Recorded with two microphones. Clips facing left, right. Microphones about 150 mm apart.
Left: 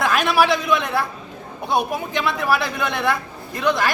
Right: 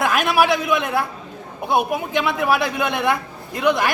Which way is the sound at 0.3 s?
10° right (ahead or behind).